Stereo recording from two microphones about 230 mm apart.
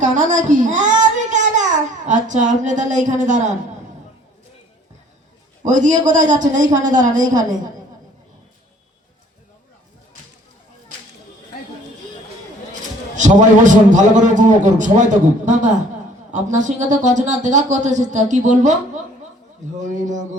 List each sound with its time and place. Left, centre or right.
0.0 s a child's voice: right
5.6 s speech: right
13.1 s speech: right
16.3 s speech: right
19.8 s speech: right